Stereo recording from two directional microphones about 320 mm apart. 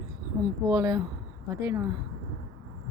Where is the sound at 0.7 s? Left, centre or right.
Centre.